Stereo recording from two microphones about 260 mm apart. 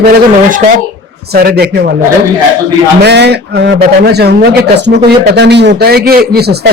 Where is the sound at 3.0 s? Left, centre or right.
Right.